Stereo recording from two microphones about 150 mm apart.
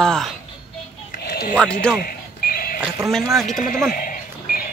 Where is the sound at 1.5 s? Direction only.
5° left (ahead or behind).